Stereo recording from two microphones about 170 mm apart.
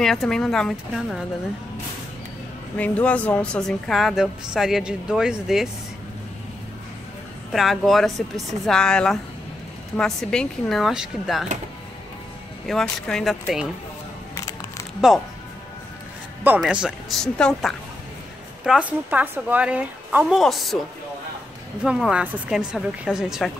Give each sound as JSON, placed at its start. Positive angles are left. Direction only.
{"t": 0.0, "sound": "a woman's voice", "side_deg": 0}
{"t": 2.8, "sound": "a woman's voice", "side_deg": 10}
{"t": 7.5, "sound": "a woman's voice", "side_deg": 0}
{"t": 12.7, "sound": "a woman's voice", "side_deg": 0}
{"t": 14.3, "sound": "music", "side_deg": 20}
{"t": 16.4, "sound": "a woman's voice", "side_deg": -5}
{"t": 21.8, "sound": "a woman's voice", "side_deg": -5}